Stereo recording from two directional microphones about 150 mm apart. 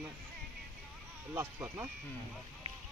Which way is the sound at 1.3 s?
15° right (ahead or behind).